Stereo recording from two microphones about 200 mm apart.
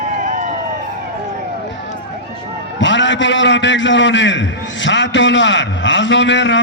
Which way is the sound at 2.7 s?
65° left (ahead or behind).